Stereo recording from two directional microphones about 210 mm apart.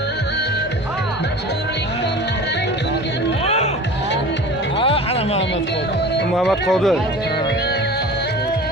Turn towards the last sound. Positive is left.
turn(degrees=0)  # may be behind; listen again after turning